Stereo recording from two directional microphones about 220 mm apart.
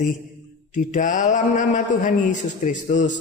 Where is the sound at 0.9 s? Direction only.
35° left (ahead or behind).